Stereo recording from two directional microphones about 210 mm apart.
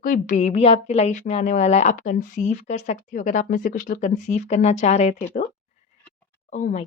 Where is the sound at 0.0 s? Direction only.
40° left (ahead or behind).